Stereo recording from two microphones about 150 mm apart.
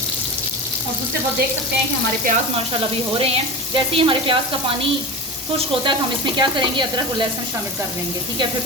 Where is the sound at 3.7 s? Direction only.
35° right (ahead or behind).